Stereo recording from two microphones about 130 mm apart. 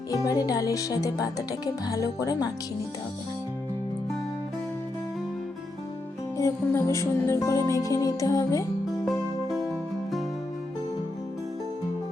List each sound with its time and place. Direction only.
0.1 s speech: 25° left (ahead or behind)
6.3 s speech: 20° left (ahead or behind)